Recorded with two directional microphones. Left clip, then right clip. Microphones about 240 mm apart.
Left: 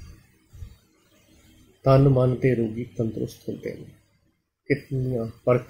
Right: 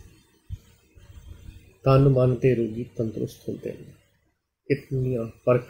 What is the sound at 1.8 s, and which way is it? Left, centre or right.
Speech, centre.